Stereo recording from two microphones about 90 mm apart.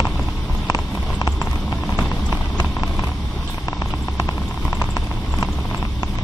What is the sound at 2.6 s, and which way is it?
Vehicle, 30° left (ahead or behind).